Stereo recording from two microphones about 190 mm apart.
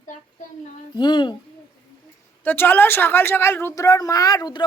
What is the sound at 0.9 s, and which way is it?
Speech, 25° left (ahead or behind).